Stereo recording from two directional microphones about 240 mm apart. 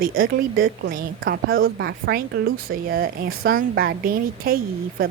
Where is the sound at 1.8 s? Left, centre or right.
Right.